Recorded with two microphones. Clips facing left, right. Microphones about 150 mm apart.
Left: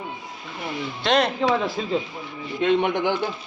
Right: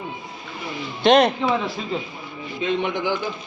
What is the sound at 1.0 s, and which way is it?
Speech, 20° right (ahead or behind).